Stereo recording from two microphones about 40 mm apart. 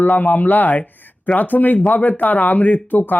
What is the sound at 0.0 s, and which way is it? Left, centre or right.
Speech, left.